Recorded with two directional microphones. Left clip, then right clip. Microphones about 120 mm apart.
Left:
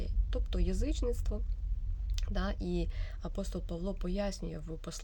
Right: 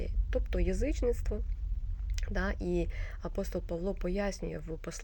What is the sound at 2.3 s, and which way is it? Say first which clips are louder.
A woman's voice: right 4 dB; 55° left (ahead or behind).